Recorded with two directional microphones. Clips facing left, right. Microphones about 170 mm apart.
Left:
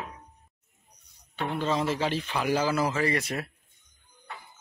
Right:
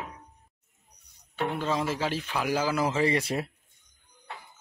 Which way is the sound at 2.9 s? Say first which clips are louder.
Right 2 dB; 25° right (ahead or behind).